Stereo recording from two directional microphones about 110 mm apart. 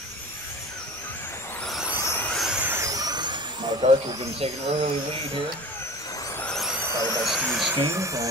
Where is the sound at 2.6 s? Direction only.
25° right (ahead or behind); by 3.8 s 45° right (ahead or behind).